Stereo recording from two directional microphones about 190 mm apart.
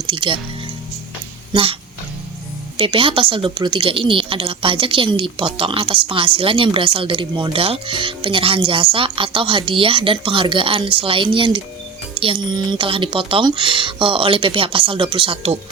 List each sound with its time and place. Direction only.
0.0 s speech: 25° right (ahead or behind)
2.7 s a woman's voice: 30° right (ahead or behind)